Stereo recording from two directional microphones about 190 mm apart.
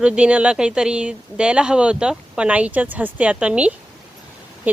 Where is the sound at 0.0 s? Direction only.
5° right (ahead or behind).